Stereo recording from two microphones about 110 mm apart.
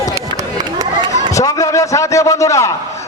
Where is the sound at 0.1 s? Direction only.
30° right (ahead or behind).